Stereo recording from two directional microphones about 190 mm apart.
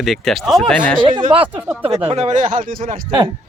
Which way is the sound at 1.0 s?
25° right (ahead or behind).